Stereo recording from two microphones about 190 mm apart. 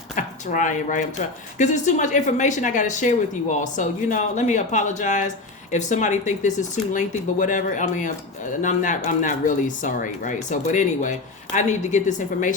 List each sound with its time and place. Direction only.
0.2 s speech: 40° left (ahead or behind)